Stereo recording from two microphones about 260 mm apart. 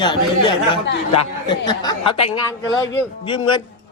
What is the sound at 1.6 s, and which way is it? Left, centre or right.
A man's voice, centre.